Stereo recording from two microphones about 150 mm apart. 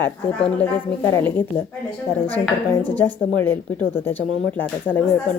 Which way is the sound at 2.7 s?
15° left (ahead or behind).